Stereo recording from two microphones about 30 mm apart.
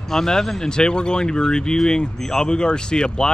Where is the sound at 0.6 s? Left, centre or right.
Left.